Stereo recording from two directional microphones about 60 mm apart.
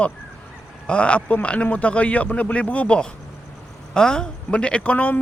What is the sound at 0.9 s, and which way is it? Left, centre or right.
A man's voice, centre.